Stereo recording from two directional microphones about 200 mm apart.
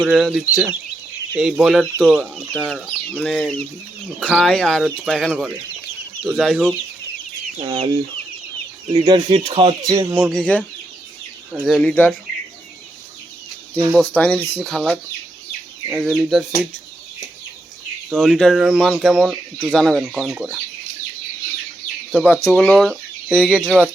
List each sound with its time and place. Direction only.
0.0 s speech: centre (ahead or behind)
7.6 s speech: 30° right (ahead or behind)
8.9 s speech: 25° right (ahead or behind)
9.9 s speech: 10° right (ahead or behind)
10.3 s speech: 5° left (ahead or behind)
13.7 s speech: 5° right (ahead or behind)
14.1 s speech: 5° left (ahead or behind)
18.1 s speech: centre (ahead or behind)
22.1 s speech: 5° left (ahead or behind)